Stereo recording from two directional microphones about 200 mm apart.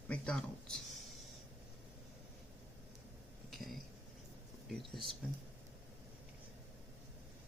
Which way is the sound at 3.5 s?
Centre (ahead or behind).